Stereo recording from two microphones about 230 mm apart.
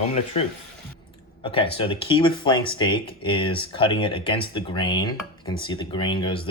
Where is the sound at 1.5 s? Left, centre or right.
Left.